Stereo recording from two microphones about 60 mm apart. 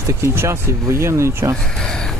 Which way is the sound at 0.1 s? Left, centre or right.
Right.